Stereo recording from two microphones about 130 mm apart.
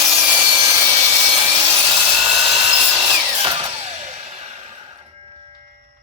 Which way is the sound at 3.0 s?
35° right (ahead or behind).